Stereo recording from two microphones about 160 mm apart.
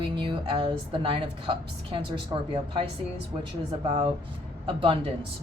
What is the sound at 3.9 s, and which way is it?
A woman's voice, 35° right (ahead or behind).